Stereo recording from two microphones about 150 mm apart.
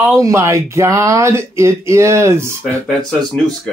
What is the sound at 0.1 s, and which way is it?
Speech, 20° right (ahead or behind).